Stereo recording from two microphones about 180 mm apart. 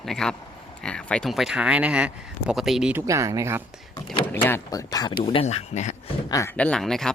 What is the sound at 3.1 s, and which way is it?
Speech, 15° right (ahead or behind).